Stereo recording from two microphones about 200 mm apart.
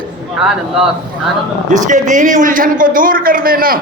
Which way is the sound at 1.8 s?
40° right (ahead or behind).